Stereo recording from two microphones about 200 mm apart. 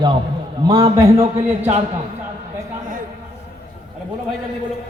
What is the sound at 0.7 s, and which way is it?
Speech, 30° right (ahead or behind).